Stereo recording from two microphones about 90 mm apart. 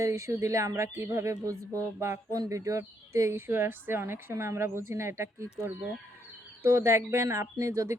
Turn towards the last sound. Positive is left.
turn(degrees=-35)  # may be behind; listen again after turning